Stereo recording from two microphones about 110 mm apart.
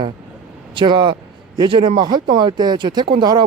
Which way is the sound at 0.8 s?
45° right (ahead or behind).